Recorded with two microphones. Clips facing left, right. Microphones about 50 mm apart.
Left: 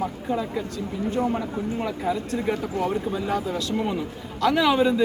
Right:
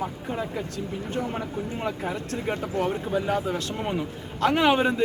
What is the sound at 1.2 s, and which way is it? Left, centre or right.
Speech, centre.